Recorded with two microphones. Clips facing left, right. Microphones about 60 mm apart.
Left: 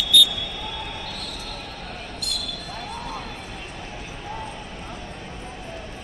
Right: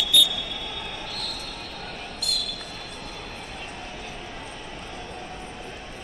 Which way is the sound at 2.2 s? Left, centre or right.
Left.